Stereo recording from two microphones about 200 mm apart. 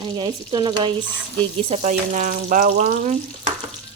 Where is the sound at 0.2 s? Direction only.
25° right (ahead or behind).